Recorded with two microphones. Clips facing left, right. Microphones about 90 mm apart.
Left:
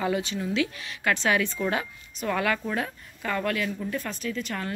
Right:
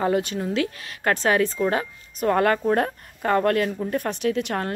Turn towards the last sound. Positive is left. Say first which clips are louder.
# right 7 dB
turn(degrees=-60)  # may be behind; listen again after turning